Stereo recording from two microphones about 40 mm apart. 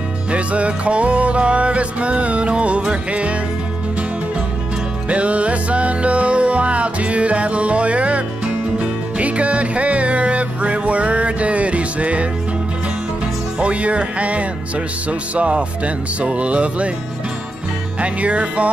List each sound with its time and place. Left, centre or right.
0.3 s music: right
5.1 s music: right
9.2 s music: right
13.6 s music: right
18.0 s music: right